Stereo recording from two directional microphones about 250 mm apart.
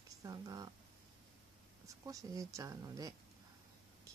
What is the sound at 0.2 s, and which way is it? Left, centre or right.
Speech, centre.